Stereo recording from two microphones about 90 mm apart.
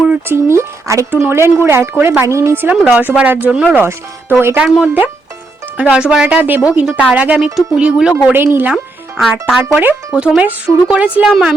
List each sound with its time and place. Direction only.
0.3 s speech: 30° right (ahead or behind)
2.6 s speech: 15° right (ahead or behind)
3.8 s speech: 25° right (ahead or behind)
4.6 s speech: 10° right (ahead or behind)
8.3 s speech: 20° right (ahead or behind)
8.7 s speech: centre (ahead or behind)
9.6 s speech: 15° right (ahead or behind)
11.3 s a woman's voice: centre (ahead or behind)